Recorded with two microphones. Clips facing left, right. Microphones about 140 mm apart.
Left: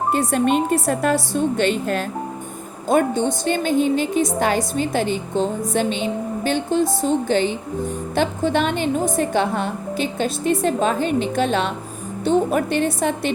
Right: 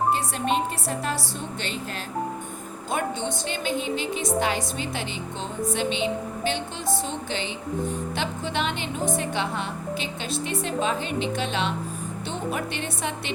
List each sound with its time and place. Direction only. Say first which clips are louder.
0.1 s a woman's voice: left 6 dB; 50° left (ahead or behind)
2.9 s a woman's voice: left 10 dB; 45° left (ahead or behind)